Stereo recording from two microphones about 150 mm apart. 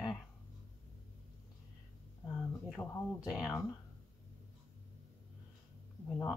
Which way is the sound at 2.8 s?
20° left (ahead or behind).